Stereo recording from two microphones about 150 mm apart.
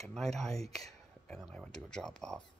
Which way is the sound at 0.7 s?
Centre (ahead or behind).